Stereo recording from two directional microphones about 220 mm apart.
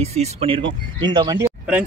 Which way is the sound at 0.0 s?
30° right (ahead or behind).